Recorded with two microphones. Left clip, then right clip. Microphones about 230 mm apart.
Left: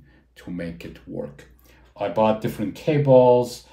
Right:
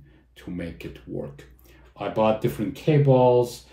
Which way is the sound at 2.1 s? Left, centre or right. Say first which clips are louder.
Left 1 dB; left.